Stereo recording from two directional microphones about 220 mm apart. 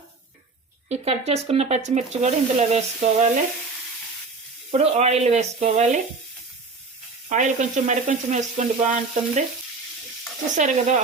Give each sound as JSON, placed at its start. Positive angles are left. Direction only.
{"t": 0.9, "sound": "speech", "side_deg": -30}
{"t": 4.7, "sound": "speech", "side_deg": -30}
{"t": 7.3, "sound": "frying", "side_deg": -35}
{"t": 10.5, "sound": "frying", "side_deg": -35}